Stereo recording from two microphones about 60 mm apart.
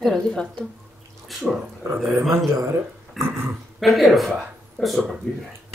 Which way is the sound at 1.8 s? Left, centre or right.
Right.